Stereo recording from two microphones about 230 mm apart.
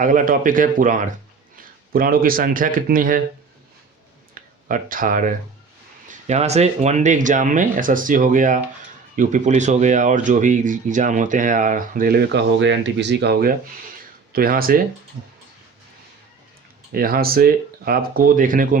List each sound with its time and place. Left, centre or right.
0.0 s speech: right
4.4 s speech: right
16.9 s speech: right